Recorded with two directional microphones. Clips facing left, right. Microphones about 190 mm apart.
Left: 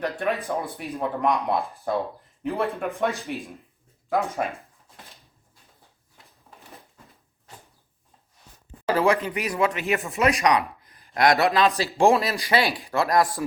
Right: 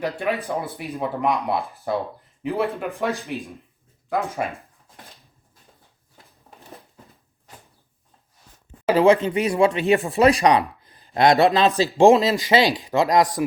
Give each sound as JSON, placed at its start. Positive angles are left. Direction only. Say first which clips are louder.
{"t": 0.4, "sound": "speech", "louder": "right 1 dB", "side_deg": -10}
{"t": 8.9, "sound": "speech", "louder": "right 6 dB", "side_deg": -25}